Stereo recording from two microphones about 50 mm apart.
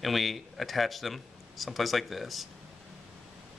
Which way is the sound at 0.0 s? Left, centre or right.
Centre.